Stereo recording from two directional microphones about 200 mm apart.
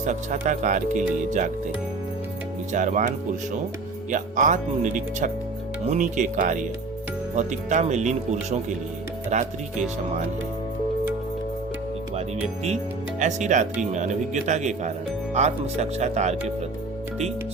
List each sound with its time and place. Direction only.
0.0 s speech: 40° right (ahead or behind)
2.7 s speech: 40° right (ahead or behind)
4.1 s speech: 40° right (ahead or behind)
13.1 s speech: 40° right (ahead or behind)